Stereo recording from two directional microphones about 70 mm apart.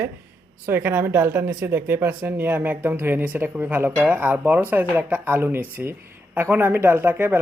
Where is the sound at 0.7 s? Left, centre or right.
Right.